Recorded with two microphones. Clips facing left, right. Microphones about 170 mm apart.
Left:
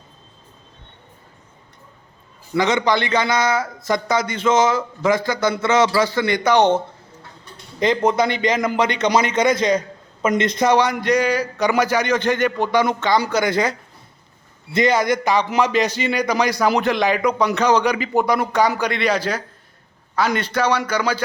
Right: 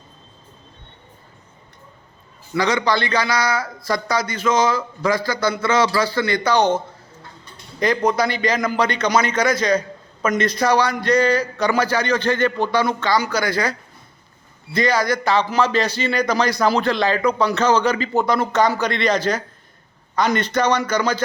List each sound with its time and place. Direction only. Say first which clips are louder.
2.6 s a man's voice: left 1 dB; 20° left (ahead or behind)
7.8 s a man's voice: left 1 dB; 20° left (ahead or behind)